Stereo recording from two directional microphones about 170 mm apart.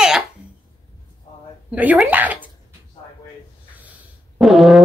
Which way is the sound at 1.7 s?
10° right (ahead or behind).